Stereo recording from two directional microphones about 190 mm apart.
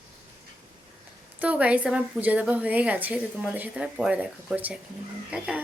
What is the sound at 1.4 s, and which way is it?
A woman's voice, 5° right (ahead or behind).